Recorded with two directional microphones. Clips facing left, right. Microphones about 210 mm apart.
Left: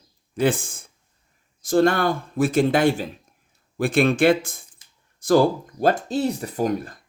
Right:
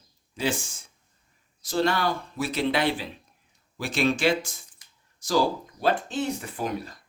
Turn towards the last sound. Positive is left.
turn(degrees=45)  # may be behind; listen again after turning